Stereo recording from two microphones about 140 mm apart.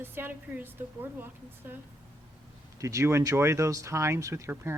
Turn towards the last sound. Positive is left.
turn(degrees=-20)  # may be behind; listen again after turning